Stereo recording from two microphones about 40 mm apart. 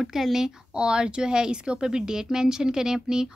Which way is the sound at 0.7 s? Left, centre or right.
Right.